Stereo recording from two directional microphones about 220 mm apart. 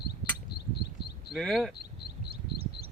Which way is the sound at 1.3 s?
Centre (ahead or behind).